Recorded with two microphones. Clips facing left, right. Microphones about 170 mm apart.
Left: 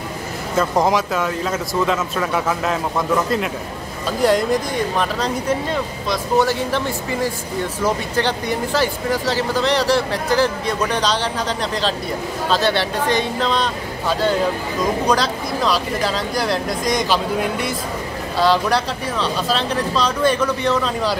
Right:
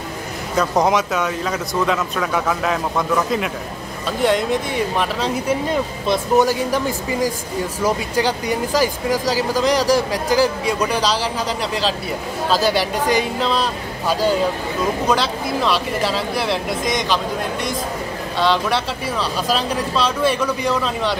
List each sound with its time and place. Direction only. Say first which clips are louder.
0.6 s speech: even; centre (ahead or behind)
6.0 s speech: right 2 dB; 20° right (ahead or behind)
12.4 s speech: right 1 dB; 10° right (ahead or behind)
19.4 s speech: even; 10° right (ahead or behind)